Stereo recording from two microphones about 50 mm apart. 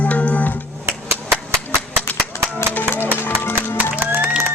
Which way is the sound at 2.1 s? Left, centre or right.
Left.